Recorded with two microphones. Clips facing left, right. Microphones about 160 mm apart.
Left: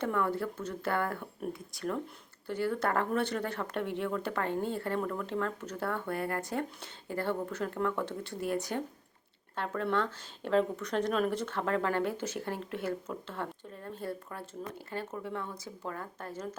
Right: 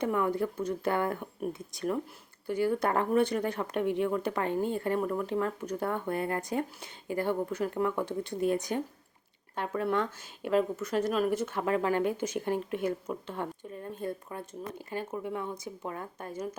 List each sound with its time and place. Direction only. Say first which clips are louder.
0.0 s speech: right 3 dB; 15° right (ahead or behind)